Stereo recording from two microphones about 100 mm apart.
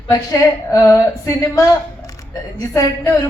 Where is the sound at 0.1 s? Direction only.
35° left (ahead or behind).